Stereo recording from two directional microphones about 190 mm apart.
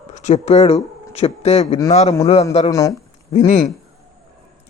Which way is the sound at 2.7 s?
15° left (ahead or behind).